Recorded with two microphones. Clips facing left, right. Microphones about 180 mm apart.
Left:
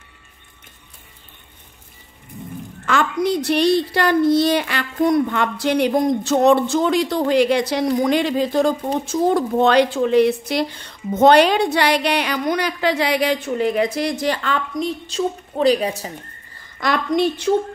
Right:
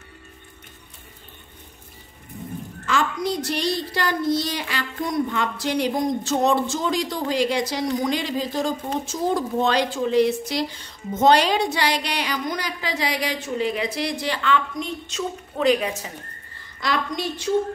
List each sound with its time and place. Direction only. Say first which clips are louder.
2.9 s a woman's voice: left 5 dB; 60° left (ahead or behind); by 16.1 s 35° left (ahead or behind)
16.8 s a woman's voice: left 7 dB; 60° left (ahead or behind)